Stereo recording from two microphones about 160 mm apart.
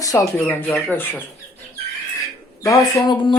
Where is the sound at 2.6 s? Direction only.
20° left (ahead or behind).